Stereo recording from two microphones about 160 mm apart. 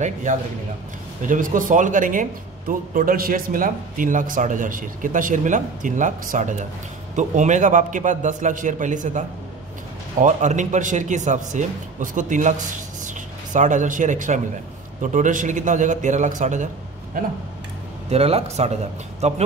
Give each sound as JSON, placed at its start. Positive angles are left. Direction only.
{"t": 0.0, "sound": "a man's voice", "side_deg": -50}
{"t": 10.2, "sound": "speech", "side_deg": -50}
{"t": 17.1, "sound": "a man's voice", "side_deg": -60}
{"t": 18.1, "sound": "a man's voice", "side_deg": -40}